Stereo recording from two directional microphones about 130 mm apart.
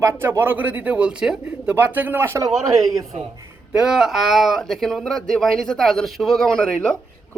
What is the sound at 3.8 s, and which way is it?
Speech, 5° right (ahead or behind).